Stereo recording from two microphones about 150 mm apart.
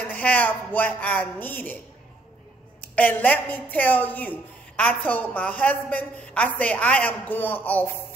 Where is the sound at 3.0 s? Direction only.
10° left (ahead or behind).